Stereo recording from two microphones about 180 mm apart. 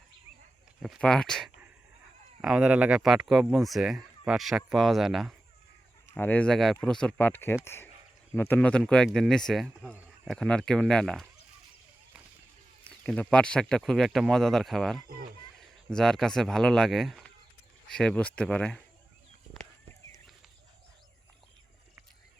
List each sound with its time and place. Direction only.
0.8 s speech: centre (ahead or behind)
13.1 s speech: 5° left (ahead or behind)